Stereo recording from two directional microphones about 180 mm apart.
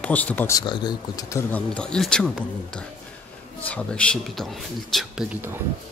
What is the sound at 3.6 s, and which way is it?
Speech, 5° left (ahead or behind).